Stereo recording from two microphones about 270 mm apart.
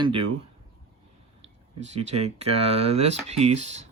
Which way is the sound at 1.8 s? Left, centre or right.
Right.